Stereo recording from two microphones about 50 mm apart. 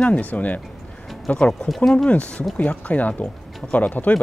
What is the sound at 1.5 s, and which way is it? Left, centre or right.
Speech, centre.